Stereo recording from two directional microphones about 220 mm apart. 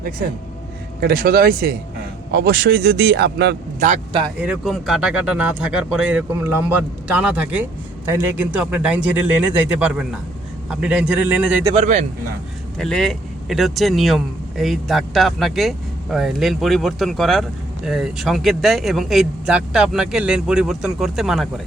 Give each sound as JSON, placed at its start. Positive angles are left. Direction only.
{"t": 1.0, "sound": "speech", "side_deg": -40}
{"t": 3.8, "sound": "speech", "side_deg": -35}
{"t": 4.4, "sound": "speech", "side_deg": -5}
{"t": 11.7, "sound": "speech", "side_deg": -30}
{"t": 12.8, "sound": "speech", "side_deg": 0}